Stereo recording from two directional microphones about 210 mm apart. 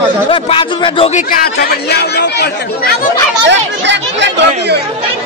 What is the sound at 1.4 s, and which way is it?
Speech, 50° left (ahead or behind).